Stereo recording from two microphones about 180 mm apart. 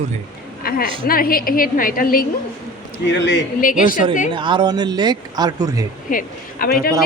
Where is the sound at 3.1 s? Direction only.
80° left.